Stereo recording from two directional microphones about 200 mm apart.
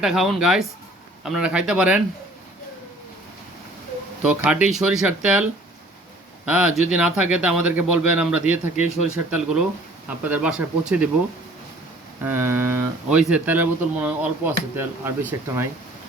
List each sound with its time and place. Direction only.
0.0 s speech: centre (ahead or behind)
4.4 s speech: 5° right (ahead or behind)
12.2 s speech: 10° right (ahead or behind)